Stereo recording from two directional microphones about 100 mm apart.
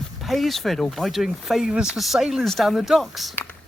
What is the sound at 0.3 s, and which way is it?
Speech, centre (ahead or behind).